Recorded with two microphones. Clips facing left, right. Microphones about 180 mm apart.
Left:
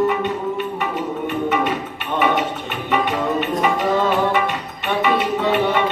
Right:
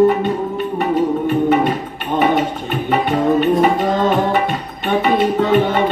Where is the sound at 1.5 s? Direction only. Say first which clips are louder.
Right 5 dB; 35° right (ahead or behind).